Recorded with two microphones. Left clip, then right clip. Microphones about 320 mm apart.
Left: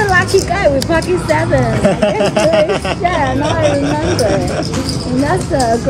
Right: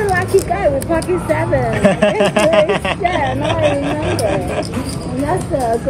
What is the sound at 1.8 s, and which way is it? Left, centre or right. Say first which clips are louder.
Speech: even; right.